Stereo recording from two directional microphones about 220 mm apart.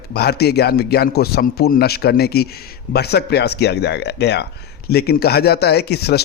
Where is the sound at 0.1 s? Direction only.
45° left (ahead or behind).